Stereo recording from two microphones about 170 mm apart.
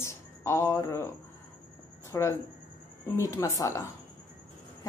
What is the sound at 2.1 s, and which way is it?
A woman's voice, 15° left (ahead or behind).